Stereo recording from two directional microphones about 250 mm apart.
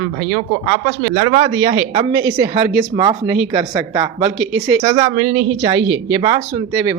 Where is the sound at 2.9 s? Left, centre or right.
Centre.